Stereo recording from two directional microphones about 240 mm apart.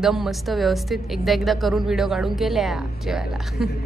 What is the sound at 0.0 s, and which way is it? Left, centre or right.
Speech, centre.